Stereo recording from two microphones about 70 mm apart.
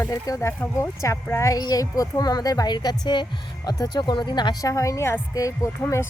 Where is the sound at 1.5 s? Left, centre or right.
Left.